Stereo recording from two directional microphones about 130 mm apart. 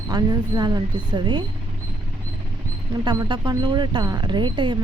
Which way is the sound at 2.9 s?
30° right (ahead or behind).